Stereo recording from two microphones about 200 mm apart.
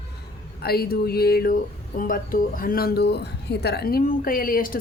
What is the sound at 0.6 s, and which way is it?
Speech, 50° left (ahead or behind).